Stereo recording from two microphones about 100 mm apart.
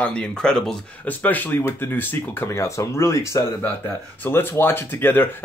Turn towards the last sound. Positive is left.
turn(degrees=20)  # may be behind; listen again after turning